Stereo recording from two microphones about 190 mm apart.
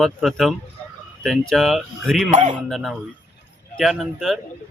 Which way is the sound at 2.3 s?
40° right (ahead or behind).